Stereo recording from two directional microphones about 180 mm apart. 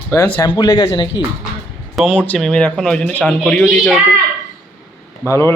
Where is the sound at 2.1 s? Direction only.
5° left (ahead or behind).